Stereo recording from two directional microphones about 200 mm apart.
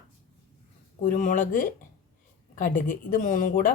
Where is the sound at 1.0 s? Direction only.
40° left (ahead or behind).